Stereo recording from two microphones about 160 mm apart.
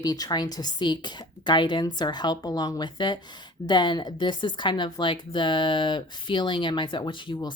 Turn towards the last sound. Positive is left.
turn(degrees=30)  # may be behind; listen again after turning